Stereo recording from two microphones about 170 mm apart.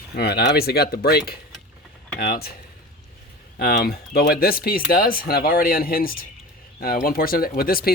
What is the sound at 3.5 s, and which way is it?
Speech, 70° left (ahead or behind).